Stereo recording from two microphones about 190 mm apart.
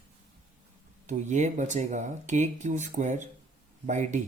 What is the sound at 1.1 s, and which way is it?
Speech, 40° right (ahead or behind).